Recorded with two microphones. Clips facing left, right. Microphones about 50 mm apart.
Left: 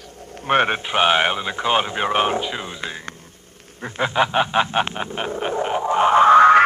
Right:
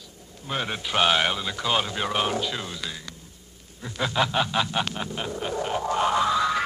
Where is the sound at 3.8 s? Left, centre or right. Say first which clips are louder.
Left 5 dB; left.